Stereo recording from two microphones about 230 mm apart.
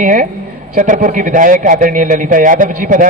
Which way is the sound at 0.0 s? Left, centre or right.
Right.